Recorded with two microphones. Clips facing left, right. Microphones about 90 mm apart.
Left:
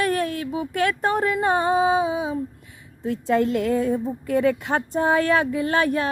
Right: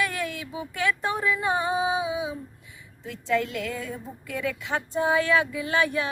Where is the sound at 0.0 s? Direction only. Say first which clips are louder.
Left 6 dB; 45° left (ahead or behind).